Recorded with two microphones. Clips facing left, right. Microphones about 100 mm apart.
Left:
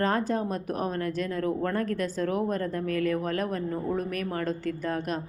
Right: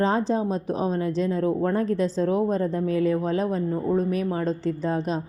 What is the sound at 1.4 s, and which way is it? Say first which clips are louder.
Speech: right 3 dB; 15° right (ahead or behind).